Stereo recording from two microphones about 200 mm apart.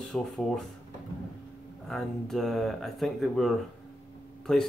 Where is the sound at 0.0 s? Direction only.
5° left (ahead or behind).